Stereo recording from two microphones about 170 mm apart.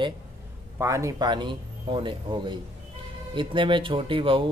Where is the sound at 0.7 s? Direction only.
20° right (ahead or behind).